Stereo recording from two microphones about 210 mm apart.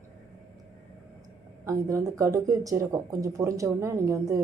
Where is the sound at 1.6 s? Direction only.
15° right (ahead or behind).